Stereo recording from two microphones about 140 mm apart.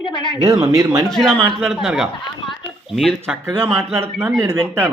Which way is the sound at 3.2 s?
15° right (ahead or behind).